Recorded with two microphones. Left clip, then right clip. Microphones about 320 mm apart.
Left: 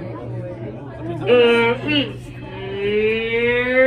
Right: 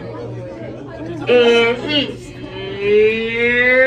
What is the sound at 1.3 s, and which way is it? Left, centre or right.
Speech, centre.